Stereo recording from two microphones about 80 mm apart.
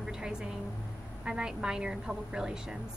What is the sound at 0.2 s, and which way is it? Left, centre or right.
Speech, centre.